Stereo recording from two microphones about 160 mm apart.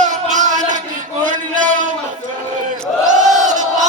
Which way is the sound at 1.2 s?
55° right (ahead or behind).